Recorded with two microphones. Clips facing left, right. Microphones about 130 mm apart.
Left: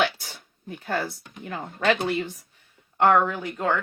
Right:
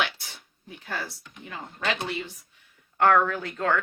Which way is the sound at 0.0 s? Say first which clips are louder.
Left 5 dB; 40° left (ahead or behind).